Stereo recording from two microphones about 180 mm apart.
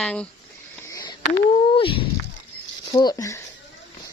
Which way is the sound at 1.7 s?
30° left (ahead or behind).